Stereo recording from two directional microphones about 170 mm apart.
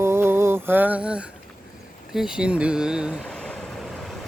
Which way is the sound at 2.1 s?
5° right (ahead or behind).